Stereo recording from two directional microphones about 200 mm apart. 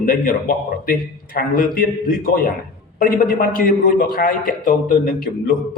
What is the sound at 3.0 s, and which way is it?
A man's voice, 45° left (ahead or behind).